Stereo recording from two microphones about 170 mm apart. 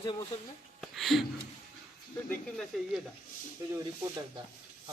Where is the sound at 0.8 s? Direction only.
Centre (ahead or behind).